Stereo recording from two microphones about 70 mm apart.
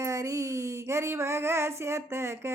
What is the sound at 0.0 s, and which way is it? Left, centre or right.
A woman's voice, right.